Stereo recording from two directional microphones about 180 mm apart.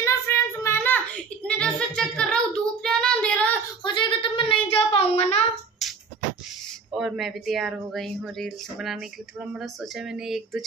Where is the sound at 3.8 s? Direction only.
25° left (ahead or behind).